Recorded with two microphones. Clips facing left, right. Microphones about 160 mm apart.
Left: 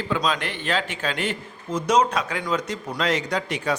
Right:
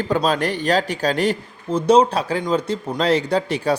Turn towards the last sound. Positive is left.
turn(degrees=-30)  # may be behind; listen again after turning